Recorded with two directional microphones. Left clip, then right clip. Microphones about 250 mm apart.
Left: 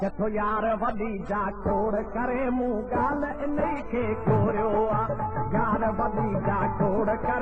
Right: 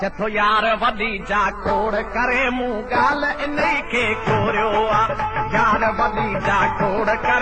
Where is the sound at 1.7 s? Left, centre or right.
Right.